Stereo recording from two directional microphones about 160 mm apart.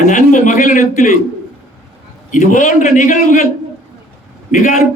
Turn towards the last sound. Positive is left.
turn(degrees=50)  # may be behind; listen again after turning